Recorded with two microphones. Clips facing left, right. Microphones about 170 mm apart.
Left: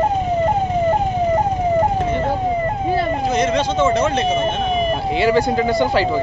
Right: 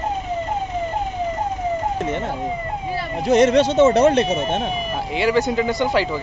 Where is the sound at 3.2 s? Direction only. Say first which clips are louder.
Right 8 dB; 70° right (ahead or behind).